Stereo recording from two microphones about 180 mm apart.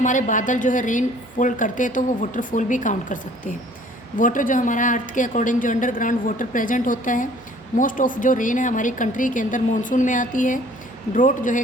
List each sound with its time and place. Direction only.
0.0 s a woman's voice: 45° left (ahead or behind)